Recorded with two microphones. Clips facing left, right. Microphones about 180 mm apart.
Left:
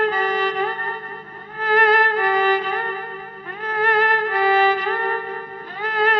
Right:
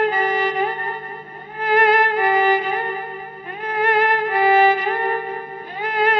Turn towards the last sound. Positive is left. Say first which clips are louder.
# right 1 dB
turn(degrees=-20)  # may be behind; listen again after turning